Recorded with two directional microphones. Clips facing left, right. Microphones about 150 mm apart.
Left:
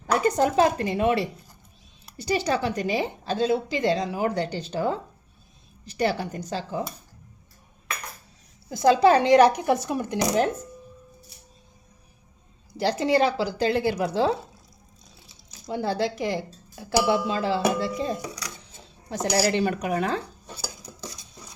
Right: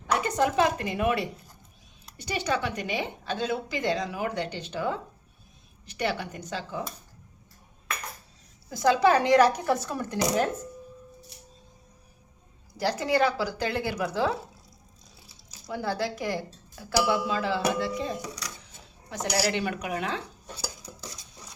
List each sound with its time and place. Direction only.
0.1 s speech: 35° left (ahead or behind)
8.7 s speech: 25° left (ahead or behind)
12.7 s speech: 25° left (ahead or behind)
15.6 s speech: 25° left (ahead or behind)